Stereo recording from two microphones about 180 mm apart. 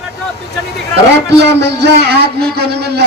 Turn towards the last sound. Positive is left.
turn(degrees=-65)  # may be behind; listen again after turning